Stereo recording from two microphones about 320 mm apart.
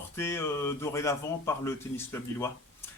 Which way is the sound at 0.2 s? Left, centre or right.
Centre.